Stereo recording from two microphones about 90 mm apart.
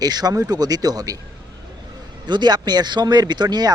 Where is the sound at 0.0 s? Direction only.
45° right (ahead or behind).